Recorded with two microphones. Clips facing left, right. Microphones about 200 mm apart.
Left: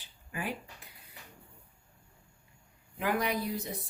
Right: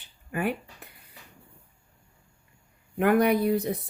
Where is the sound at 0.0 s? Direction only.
60° right (ahead or behind).